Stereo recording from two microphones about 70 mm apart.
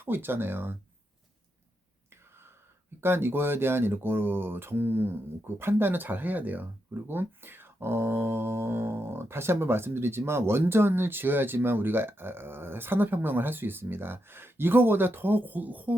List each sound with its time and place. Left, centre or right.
0.0 s speech: right
3.0 s speech: right